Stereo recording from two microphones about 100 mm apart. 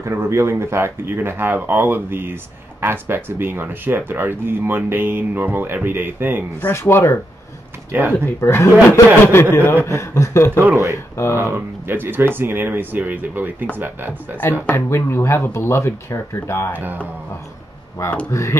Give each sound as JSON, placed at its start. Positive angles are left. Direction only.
{"t": 0.0, "sound": "speech", "side_deg": -30}
{"t": 6.6, "sound": "speech", "side_deg": 25}
{"t": 7.9, "sound": "speech", "side_deg": -20}
{"t": 8.4, "sound": "speech", "side_deg": 25}
{"t": 10.6, "sound": "speech", "side_deg": -25}
{"t": 14.7, "sound": "speech", "side_deg": 25}
{"t": 18.3, "sound": "speech", "side_deg": 30}